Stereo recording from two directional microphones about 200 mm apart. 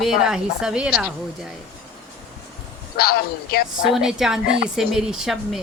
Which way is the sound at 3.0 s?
50° left (ahead or behind).